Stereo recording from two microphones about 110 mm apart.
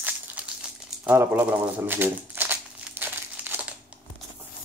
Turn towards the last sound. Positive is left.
turn(degrees=-15)  # may be behind; listen again after turning